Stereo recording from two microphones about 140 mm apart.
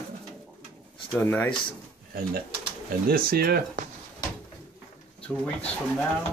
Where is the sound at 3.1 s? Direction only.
90° right.